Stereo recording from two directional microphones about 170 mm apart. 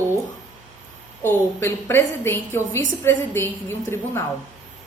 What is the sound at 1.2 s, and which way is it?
A woman's voice, 15° left (ahead or behind).